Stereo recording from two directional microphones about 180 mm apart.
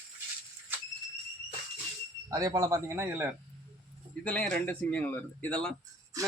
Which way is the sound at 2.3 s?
20° right (ahead or behind).